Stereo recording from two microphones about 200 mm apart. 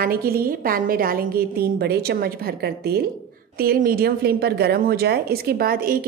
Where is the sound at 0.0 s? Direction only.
50° right (ahead or behind).